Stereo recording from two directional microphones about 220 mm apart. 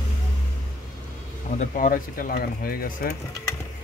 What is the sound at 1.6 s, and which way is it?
Speech, 40° left (ahead or behind).